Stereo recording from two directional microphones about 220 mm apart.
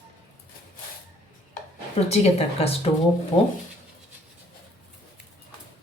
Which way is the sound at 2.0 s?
30° left (ahead or behind).